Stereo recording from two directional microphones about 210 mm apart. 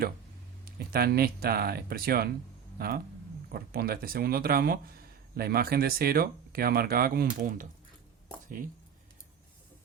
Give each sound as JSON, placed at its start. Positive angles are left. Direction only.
{"t": 0.6, "sound": "speech", "side_deg": -45}